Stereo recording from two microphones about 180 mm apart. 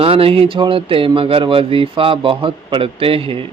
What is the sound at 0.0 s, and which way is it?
Speech, 30° right (ahead or behind).